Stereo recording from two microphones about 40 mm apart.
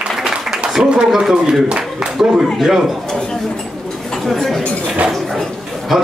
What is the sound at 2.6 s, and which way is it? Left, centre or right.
Speech, centre.